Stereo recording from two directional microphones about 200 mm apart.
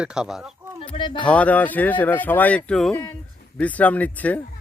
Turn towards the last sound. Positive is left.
turn(degrees=5)  # may be behind; listen again after turning